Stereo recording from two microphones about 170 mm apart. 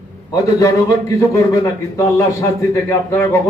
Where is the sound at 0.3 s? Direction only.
20° left (ahead or behind).